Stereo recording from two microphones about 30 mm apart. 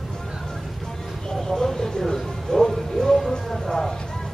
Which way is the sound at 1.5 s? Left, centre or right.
Centre.